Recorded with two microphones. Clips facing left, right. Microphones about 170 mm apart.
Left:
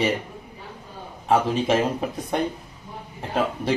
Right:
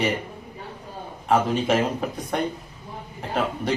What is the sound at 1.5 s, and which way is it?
Speech, centre (ahead or behind).